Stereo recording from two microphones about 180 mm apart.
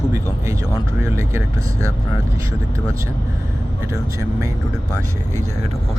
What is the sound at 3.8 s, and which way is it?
Speech, 15° right (ahead or behind).